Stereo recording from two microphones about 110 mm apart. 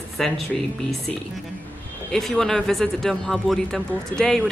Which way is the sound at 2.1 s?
5° left (ahead or behind).